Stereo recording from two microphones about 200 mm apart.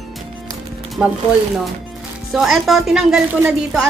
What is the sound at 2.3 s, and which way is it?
Speech, centre (ahead or behind).